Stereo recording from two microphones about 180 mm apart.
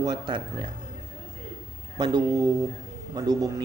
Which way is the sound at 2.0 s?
25° right (ahead or behind).